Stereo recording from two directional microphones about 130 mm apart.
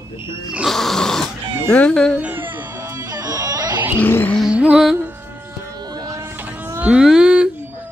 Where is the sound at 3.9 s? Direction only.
15° left (ahead or behind).